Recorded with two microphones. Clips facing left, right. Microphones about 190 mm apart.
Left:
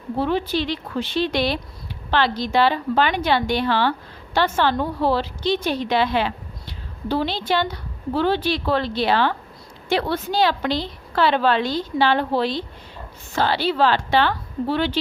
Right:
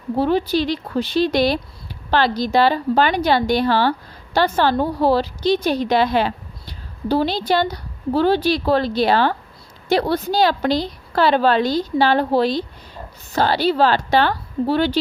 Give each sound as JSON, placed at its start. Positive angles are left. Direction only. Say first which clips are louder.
{"t": 0.2, "sound": "a woman's voice", "louder": "right 4 dB", "side_deg": -40}